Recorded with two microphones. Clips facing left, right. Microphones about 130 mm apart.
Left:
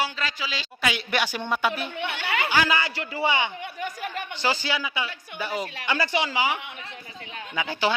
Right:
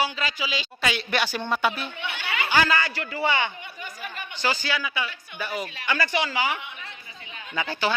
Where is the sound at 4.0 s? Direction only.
65° left (ahead or behind).